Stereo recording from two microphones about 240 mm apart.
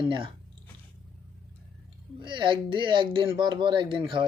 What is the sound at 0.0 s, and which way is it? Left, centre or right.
Speech, right.